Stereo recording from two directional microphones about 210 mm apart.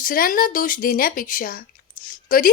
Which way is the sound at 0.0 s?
40° left (ahead or behind).